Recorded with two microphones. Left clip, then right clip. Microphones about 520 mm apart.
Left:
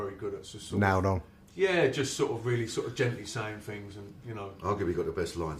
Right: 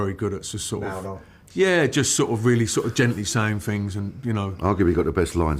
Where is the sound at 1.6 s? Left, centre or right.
Right.